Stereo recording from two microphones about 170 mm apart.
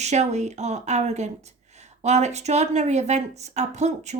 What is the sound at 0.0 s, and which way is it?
A woman's voice, 40° right (ahead or behind).